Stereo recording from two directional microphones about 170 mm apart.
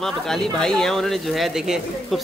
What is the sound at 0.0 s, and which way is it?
Speech, centre (ahead or behind).